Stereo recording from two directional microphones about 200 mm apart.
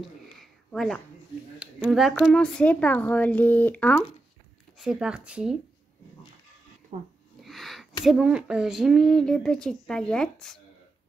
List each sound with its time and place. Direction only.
0.0 s a sound: centre (ahead or behind)
1.6 s speech: centre (ahead or behind)
4.7 s speech: 5° right (ahead or behind)
6.9 s speech: 35° right (ahead or behind)
7.4 s speech: centre (ahead or behind)